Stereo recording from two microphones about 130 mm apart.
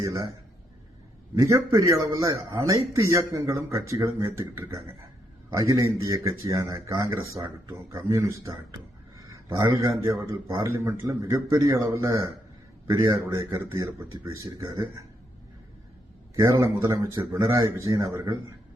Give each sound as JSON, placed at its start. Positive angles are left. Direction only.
{"t": 0.0, "sound": "a man's voice", "side_deg": -25}
{"t": 1.4, "sound": "a man's voice", "side_deg": -25}
{"t": 9.1, "sound": "a sound", "side_deg": -25}
{"t": 10.6, "sound": "a man's voice", "side_deg": -20}
{"t": 16.3, "sound": "a man's voice", "side_deg": -20}